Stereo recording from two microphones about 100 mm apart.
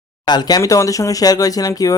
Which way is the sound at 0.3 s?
45° left (ahead or behind).